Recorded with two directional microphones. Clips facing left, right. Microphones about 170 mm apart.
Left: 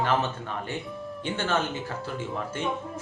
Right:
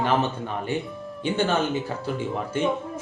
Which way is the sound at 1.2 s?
15° right (ahead or behind).